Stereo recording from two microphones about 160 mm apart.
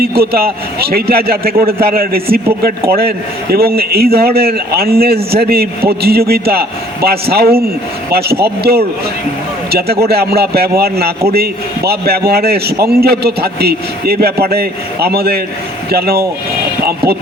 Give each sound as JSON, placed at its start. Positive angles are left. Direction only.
{"t": 0.2, "sound": "a man's voice", "side_deg": -75}